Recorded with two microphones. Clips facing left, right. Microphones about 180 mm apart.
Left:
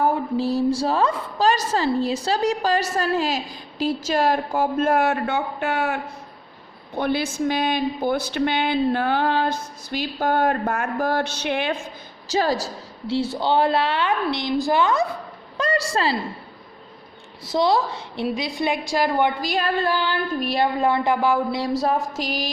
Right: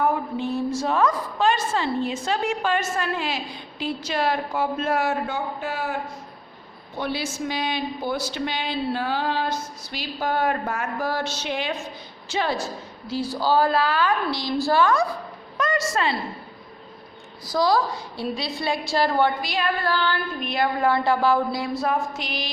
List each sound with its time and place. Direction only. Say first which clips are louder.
0.0 s a woman's voice: left 3 dB; 35° left (ahead or behind); by 6.0 s 75° left (ahead or behind)
6.9 s a woman's voice: left 5 dB; 55° left (ahead or behind)
12.3 s a woman's voice: left 3 dB; 40° left (ahead or behind); by 15.0 s 20° left (ahead or behind)
15.5 s a woman's voice: left 1 dB; 30° left (ahead or behind)
17.4 s a woman's voice: left 1 dB; 25° left (ahead or behind)
19.4 s a woman's voice: left 2 dB; 40° left (ahead or behind)
19.8 s a woman's voice: left 1 dB; 15° left (ahead or behind)
20.4 s a woman's voice: left 3 dB; 35° left (ahead or behind)
20.7 s a woman's voice: left 1 dB; 20° left (ahead or behind)
21.6 s a woman's voice: left 3 dB; 35° left (ahead or behind)